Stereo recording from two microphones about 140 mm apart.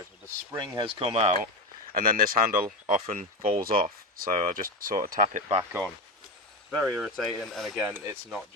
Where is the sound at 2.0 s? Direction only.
90° right; by 3.5 s 60° right (ahead or behind).